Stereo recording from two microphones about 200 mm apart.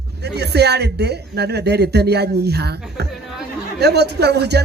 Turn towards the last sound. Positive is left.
turn(degrees=-55)  # may be behind; listen again after turning